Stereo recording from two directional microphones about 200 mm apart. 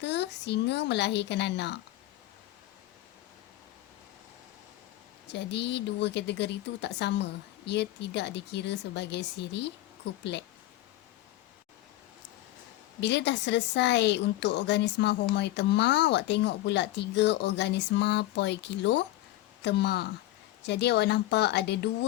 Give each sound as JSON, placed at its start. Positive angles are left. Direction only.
{"t": 0.0, "sound": "a woman's voice", "side_deg": 60}
{"t": 5.3, "sound": "a woman's voice", "side_deg": 60}
{"t": 13.0, "sound": "a woman's voice", "side_deg": 60}